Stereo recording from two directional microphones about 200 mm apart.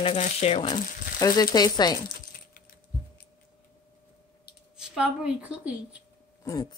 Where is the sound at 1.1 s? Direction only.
20° left (ahead or behind).